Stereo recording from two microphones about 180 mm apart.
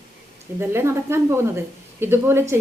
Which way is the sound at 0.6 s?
15° right (ahead or behind).